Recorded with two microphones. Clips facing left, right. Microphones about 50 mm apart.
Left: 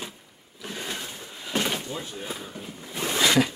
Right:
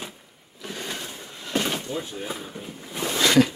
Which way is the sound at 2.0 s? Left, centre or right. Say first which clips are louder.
Right 3 dB; centre.